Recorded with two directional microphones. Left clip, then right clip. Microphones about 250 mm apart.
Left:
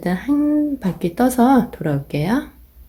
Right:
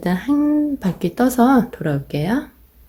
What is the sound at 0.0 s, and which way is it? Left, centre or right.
Speech, centre.